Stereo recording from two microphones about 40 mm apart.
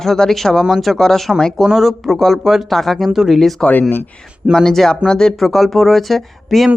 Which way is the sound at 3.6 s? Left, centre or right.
Centre.